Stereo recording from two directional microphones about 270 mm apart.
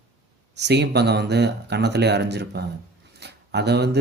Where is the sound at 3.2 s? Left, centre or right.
Right.